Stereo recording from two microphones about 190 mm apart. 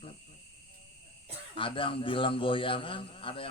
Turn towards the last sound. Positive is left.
turn(degrees=30)  # may be behind; listen again after turning